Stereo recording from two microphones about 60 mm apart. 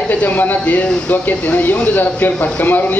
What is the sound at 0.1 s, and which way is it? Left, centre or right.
A man's voice, left.